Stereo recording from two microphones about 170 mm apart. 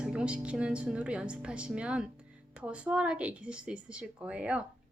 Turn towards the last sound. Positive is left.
turn(degrees=-5)  # may be behind; listen again after turning